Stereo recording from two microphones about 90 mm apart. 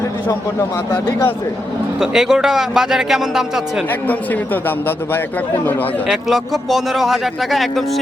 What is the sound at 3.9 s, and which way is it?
A man's voice, 20° left (ahead or behind).